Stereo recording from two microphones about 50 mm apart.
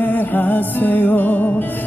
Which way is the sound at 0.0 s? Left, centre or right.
Left.